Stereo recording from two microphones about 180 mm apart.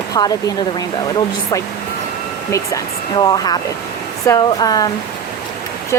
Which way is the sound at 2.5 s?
20° left (ahead or behind).